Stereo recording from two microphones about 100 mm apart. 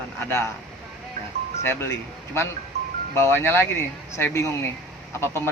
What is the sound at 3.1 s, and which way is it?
Speech, 25° left (ahead or behind).